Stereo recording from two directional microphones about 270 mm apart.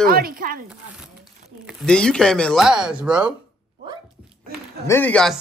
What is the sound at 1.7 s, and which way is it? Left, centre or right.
Speech, centre.